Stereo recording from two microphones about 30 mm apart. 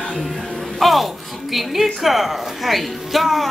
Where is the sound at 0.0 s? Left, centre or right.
Centre.